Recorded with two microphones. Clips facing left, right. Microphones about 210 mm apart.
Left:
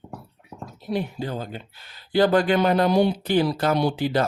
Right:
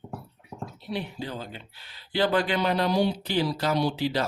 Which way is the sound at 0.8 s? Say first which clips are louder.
Left 6 dB; 45° left (ahead or behind).